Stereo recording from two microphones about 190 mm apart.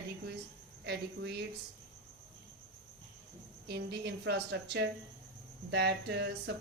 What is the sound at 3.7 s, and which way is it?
Speech, 60° right (ahead or behind).